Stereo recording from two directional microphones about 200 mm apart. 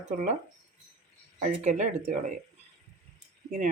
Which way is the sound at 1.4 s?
40° right (ahead or behind).